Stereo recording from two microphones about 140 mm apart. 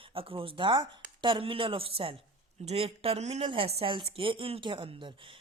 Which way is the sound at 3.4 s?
40° right (ahead or behind).